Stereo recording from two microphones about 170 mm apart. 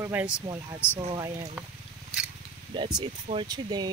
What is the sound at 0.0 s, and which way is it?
Speech, 10° right (ahead or behind).